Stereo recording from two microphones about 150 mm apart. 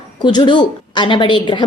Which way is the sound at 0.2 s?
30° left (ahead or behind).